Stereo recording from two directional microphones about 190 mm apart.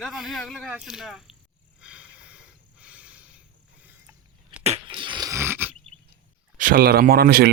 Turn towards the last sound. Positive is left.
turn(degrees=-55)  # may be behind; listen again after turning